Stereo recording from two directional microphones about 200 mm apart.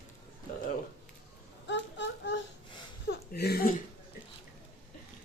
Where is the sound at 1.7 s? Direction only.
60° left (ahead or behind).